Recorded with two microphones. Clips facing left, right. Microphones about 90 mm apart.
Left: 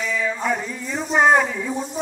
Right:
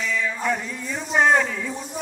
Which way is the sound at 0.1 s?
5° left (ahead or behind).